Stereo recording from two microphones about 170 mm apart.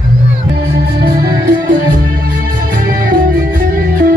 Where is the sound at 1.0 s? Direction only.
65° right (ahead or behind).